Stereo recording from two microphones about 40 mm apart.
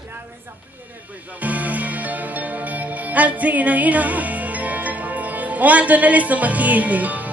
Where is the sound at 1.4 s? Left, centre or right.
Right.